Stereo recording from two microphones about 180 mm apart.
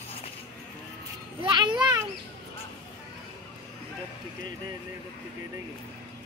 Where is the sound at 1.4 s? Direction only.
25° right (ahead or behind).